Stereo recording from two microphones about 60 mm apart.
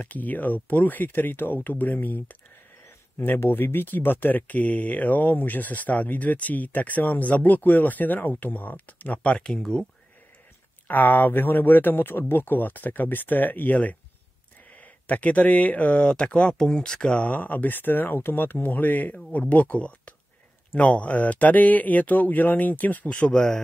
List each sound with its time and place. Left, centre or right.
0.0 s speech: left; by 9.8 s centre
10.9 s speech: left; by 17.2 s centre
17.2 s speech: left
23.3 s speech: centre